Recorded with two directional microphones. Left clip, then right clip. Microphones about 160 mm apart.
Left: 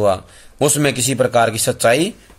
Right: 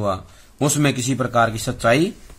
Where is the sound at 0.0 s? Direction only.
30° left (ahead or behind).